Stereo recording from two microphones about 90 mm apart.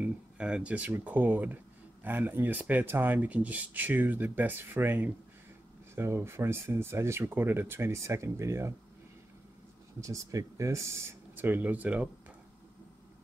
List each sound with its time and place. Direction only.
0.0 s speech: 10° right (ahead or behind); by 8.7 s 35° right (ahead or behind)
9.9 s speech: 35° right (ahead or behind); by 12.1 s 15° right (ahead or behind)